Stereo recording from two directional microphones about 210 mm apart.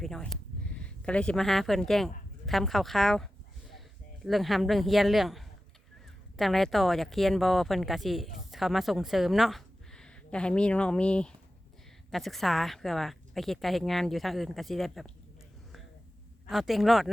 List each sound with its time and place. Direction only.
0.0 s a sound: centre (ahead or behind)
2.5 s speech: centre (ahead or behind)
16.5 s speech: centre (ahead or behind)